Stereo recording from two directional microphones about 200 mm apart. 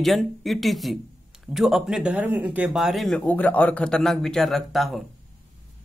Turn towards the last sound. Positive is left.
turn(degrees=0)  # may be behind; listen again after turning